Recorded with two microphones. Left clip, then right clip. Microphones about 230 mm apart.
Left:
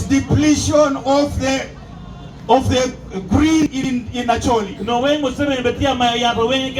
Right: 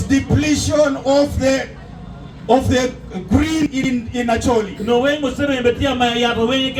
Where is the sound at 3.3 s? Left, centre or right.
Right.